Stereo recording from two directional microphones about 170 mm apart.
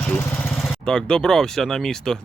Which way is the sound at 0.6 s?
Centre (ahead or behind).